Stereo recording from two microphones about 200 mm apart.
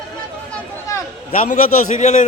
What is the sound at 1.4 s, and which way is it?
Speech, 40° left (ahead or behind).